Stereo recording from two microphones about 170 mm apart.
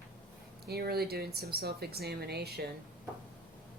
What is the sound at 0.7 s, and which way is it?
Speech, 65° right (ahead or behind).